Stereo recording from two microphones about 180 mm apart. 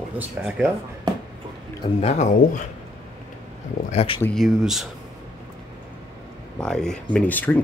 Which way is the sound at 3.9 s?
30° left (ahead or behind).